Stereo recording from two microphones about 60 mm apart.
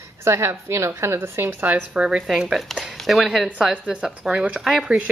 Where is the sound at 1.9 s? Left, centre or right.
Centre.